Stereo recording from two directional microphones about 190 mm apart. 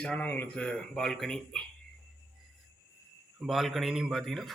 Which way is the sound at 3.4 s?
Centre (ahead or behind).